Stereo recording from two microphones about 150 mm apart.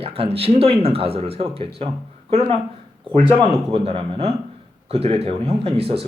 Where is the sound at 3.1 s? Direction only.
35° right (ahead or behind).